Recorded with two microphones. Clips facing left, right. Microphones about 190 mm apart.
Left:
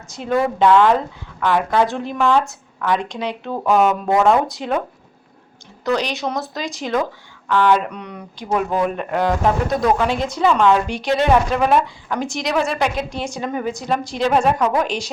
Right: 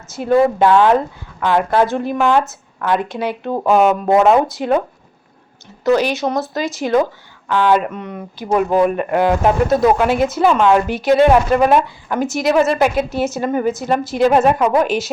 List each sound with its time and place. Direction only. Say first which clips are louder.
0.1 s a woman's voice: right 6 dB; 5° right (ahead or behind)
4.1 s speech: right 3 dB; 20° right (ahead or behind)
4.4 s a woman's voice: right 5 dB; centre (ahead or behind)
5.8 s a woman's voice: right 6 dB; 5° right (ahead or behind)